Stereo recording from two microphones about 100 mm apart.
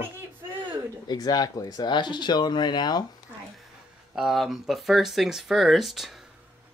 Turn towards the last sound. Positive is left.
turn(degrees=0)  # may be behind; listen again after turning